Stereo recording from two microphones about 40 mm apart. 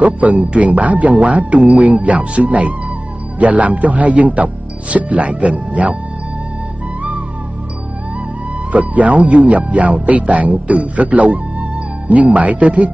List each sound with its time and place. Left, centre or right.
0.0 s speech: right
7.0 s music: right
8.7 s speech: right